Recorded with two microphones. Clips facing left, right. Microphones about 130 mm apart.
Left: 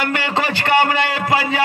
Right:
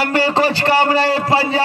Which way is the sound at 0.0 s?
35° right (ahead or behind).